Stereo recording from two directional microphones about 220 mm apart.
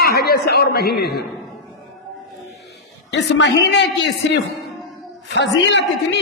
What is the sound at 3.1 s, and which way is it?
A man's voice, 50° left (ahead or behind).